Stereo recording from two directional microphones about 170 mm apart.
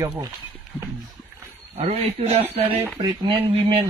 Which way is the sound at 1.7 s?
40° right (ahead or behind).